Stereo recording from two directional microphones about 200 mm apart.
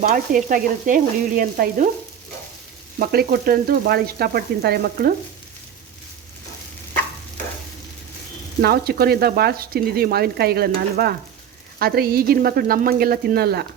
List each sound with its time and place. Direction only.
0.0 s speech: 45° right (ahead or behind)
3.0 s speech: 50° right (ahead or behind)
8.6 s speech: 50° right (ahead or behind)